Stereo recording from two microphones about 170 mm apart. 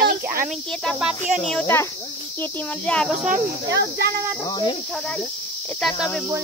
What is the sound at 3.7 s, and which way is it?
Speech, 75° right (ahead or behind).